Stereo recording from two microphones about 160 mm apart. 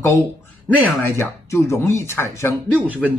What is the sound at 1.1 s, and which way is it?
Speech, 15° left (ahead or behind).